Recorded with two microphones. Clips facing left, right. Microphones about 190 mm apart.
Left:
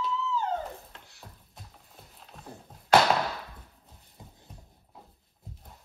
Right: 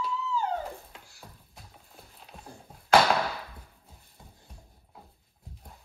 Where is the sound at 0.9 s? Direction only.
Centre (ahead or behind).